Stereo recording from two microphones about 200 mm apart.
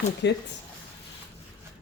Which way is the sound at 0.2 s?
60° left (ahead or behind).